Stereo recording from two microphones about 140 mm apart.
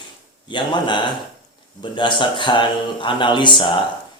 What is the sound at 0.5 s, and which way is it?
A man's voice, 35° left (ahead or behind).